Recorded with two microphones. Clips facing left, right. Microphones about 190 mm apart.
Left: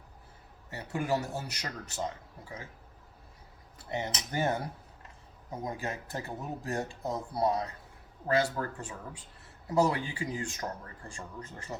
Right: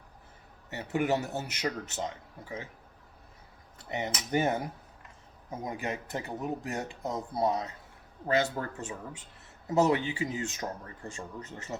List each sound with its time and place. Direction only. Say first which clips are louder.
0.7 s speech: right 3 dB; 20° right (ahead or behind)
3.8 s speech: right 1 dB; 20° right (ahead or behind)